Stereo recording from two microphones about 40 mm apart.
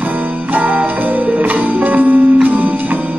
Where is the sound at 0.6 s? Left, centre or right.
Right.